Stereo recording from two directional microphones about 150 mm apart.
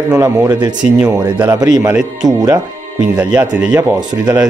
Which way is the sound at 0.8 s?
10° right (ahead or behind).